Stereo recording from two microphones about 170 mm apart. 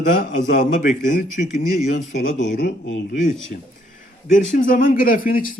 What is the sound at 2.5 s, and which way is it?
Speech, 90° left.